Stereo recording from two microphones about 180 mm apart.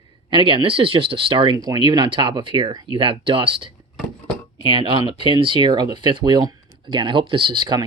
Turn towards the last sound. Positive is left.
turn(degrees=-25)  # may be behind; listen again after turning